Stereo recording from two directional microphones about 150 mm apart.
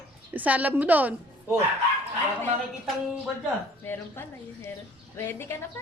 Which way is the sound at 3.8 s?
15° left (ahead or behind).